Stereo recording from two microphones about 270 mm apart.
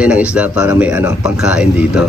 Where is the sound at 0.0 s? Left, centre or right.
Centre.